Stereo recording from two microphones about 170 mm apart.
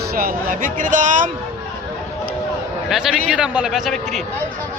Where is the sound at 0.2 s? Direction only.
55° right (ahead or behind).